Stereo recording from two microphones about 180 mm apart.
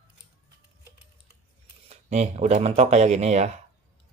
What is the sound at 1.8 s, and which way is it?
Speech, 35° right (ahead or behind).